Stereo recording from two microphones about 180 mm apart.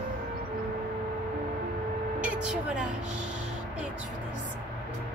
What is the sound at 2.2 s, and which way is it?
Speech, 5° right (ahead or behind).